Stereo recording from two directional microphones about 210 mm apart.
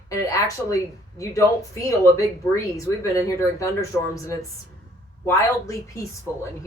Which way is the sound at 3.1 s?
15° left (ahead or behind).